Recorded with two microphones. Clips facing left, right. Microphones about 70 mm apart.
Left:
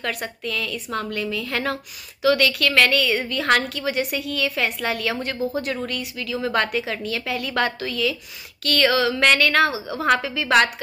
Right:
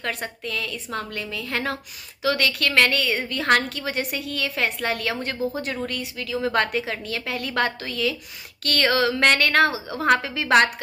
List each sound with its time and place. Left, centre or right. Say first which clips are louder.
0.0 s a woman's voice: left 2 dB; right